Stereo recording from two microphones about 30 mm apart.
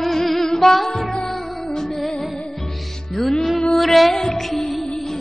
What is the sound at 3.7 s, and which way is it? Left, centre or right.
Music, centre.